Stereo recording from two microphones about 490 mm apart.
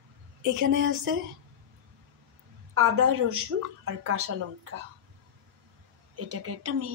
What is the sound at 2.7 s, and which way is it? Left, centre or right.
Speech, right.